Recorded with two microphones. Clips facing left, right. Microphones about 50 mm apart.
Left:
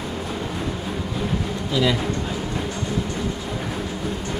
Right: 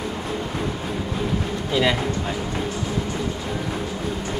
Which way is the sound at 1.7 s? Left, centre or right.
Right.